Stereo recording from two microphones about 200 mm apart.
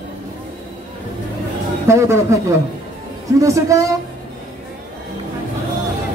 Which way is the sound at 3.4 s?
15° right (ahead or behind).